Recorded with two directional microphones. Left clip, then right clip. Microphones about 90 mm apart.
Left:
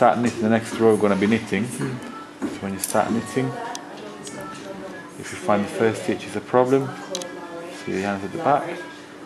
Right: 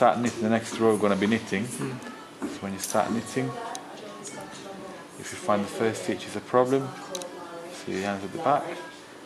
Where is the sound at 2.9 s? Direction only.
20° right (ahead or behind).